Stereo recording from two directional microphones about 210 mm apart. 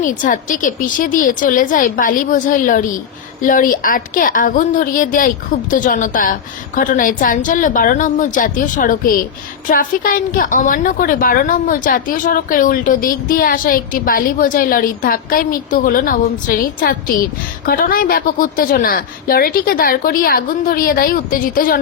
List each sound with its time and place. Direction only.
0.0 s a woman's voice: 40° left (ahead or behind)